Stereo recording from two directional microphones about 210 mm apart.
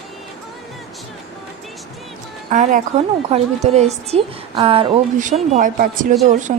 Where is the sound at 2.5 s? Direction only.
35° right (ahead or behind).